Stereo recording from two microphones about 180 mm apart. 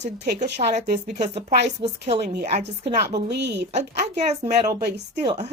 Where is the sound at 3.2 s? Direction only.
70° right (ahead or behind).